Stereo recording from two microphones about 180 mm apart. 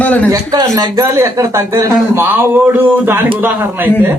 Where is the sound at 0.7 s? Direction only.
20° right (ahead or behind).